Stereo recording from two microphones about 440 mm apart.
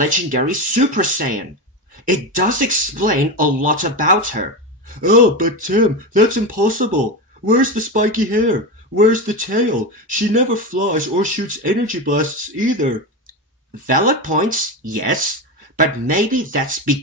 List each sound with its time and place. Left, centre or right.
0.0 s speech: centre